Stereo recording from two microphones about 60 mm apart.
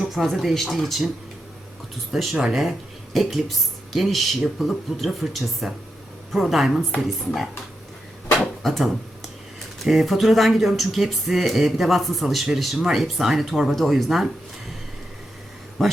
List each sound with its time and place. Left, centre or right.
0.0 s speech: centre
2.3 s speech: centre
2.6 s speech: centre
8.6 s speech: centre
15.8 s speech: centre